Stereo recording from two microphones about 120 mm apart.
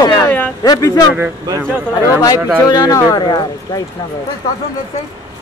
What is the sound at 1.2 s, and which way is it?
Speech, 20° right (ahead or behind).